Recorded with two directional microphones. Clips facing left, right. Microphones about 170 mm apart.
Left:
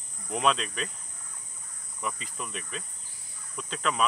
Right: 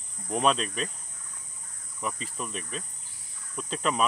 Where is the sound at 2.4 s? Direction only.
Centre (ahead or behind).